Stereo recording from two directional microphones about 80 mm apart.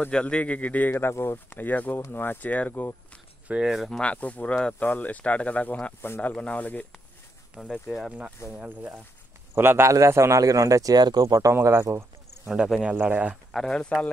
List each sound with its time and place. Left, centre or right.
0.0 s speech: centre
3.4 s speech: centre
3.7 s speech: centre
4.0 s speech: centre
6.0 s speech: left
6.3 s speech: centre
7.7 s speech: centre
8.5 s speech: centre; by 11.5 s right
11.6 s speech: right
12.4 s speech: centre
12.9 s speech: centre
13.5 s speech: centre